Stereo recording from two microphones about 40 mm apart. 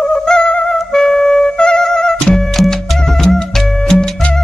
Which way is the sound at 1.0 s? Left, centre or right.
Centre.